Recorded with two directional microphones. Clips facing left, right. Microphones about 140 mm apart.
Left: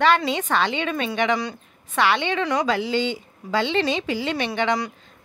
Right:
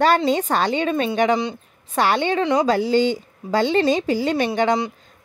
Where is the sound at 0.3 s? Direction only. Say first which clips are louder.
Right 3 dB; 40° right (ahead or behind).